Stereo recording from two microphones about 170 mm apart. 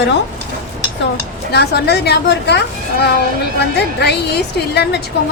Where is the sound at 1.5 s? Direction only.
75° left (ahead or behind).